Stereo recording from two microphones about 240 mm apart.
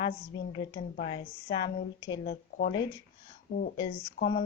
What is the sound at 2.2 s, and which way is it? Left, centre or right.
Speech, left.